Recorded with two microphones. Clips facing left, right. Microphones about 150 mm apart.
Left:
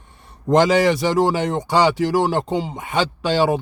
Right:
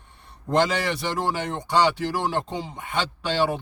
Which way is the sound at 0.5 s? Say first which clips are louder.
Left 7 dB; 90° left.